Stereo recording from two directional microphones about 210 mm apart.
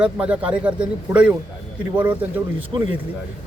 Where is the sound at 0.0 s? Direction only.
5° right (ahead or behind).